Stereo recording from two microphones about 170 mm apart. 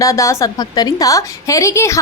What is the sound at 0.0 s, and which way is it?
A woman's voice, 20° left (ahead or behind).